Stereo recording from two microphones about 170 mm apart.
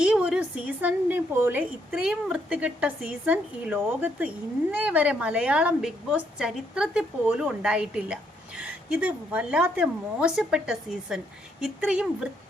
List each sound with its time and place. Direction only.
0.0 s a woman's voice: 5° right (ahead or behind)